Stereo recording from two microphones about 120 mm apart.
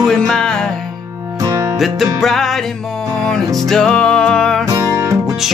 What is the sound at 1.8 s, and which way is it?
Music, centre (ahead or behind).